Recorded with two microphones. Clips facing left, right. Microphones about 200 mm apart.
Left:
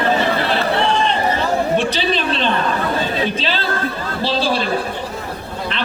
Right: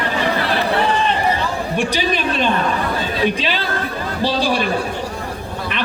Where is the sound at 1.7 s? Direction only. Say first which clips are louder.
Left 1 dB; 10° right (ahead or behind).